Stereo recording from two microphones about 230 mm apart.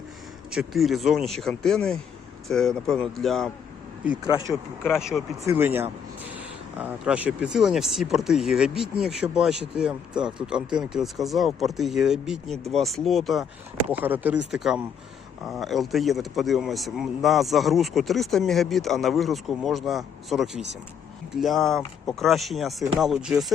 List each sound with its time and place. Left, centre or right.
0.5 s speech: centre
4.9 s speech: centre